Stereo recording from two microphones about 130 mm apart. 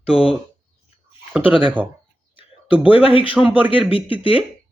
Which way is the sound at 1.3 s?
10° right (ahead or behind).